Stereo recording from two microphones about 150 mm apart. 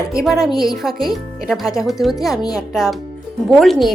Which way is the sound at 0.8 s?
Centre (ahead or behind).